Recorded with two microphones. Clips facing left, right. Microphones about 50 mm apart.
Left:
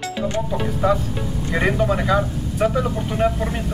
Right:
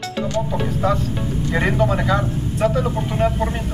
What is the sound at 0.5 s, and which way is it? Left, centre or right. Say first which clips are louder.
Speech: left 2 dB; centre.